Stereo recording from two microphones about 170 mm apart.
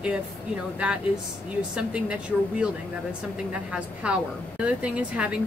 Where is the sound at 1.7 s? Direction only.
5° right (ahead or behind).